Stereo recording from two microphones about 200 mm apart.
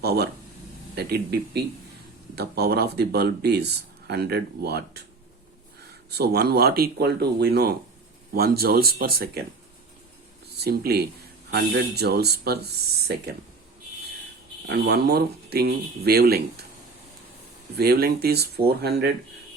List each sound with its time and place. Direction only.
0.0 s speech: 55° right (ahead or behind)
6.1 s speech: 55° right (ahead or behind)
10.6 s speech: 50° right (ahead or behind)
14.7 s speech: 55° right (ahead or behind)
17.7 s speech: 50° right (ahead or behind)